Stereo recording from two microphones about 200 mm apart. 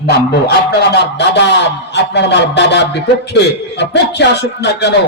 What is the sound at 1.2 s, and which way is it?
A man's voice, 60° left (ahead or behind).